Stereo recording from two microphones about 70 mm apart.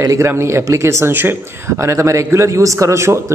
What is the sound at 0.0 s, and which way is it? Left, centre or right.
Speech, right.